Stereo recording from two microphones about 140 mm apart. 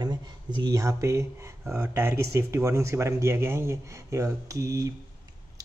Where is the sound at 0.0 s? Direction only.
30° right (ahead or behind).